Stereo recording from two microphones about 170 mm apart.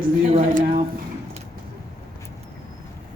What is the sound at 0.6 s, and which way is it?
Speech, 55° right (ahead or behind).